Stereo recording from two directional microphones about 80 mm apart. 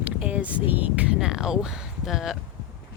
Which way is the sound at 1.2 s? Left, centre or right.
Centre.